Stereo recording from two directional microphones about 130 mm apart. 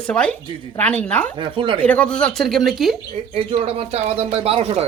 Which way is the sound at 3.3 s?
50° right (ahead or behind).